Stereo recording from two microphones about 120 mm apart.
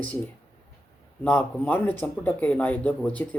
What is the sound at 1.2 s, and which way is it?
Speech, 10° left (ahead or behind).